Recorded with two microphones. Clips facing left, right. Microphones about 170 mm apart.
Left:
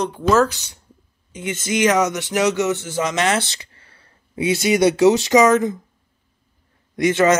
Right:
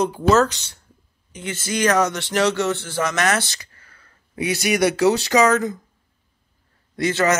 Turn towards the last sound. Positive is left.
turn(degrees=20)  # may be behind; listen again after turning